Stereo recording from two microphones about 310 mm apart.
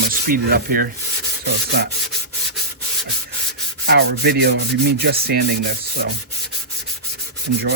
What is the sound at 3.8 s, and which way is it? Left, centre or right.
Rub, right.